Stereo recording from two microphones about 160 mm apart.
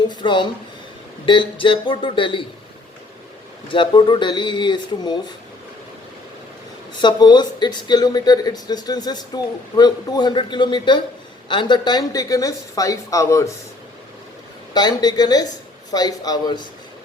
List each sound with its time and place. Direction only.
0.2 s speech: 30° left (ahead or behind)
3.7 s speech: 30° left (ahead or behind)
7.0 s speech: 25° left (ahead or behind)
14.7 s speech: 25° left (ahead or behind)